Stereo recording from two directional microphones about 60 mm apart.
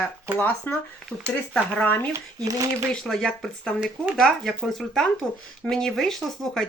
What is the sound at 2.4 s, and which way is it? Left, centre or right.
Speech, right.